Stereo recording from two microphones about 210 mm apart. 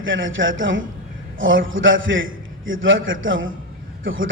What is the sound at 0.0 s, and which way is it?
A man's voice, 65° right (ahead or behind).